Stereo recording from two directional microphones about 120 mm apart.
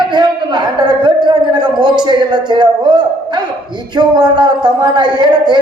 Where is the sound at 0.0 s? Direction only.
40° right (ahead or behind).